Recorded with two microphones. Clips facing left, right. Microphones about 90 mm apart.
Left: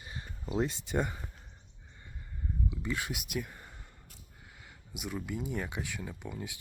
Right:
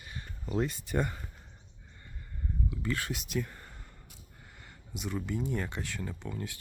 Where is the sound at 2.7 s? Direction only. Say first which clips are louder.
Right 3 dB; 15° left (ahead or behind).